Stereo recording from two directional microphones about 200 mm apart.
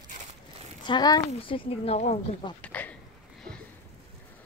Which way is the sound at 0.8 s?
20° left (ahead or behind).